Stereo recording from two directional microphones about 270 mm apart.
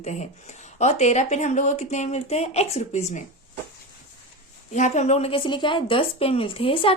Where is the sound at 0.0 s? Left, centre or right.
Left.